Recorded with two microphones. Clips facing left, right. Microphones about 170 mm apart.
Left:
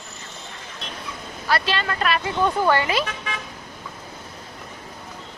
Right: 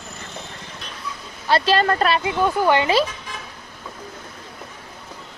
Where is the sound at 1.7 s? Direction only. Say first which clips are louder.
Right 7 dB; 40° right (ahead or behind).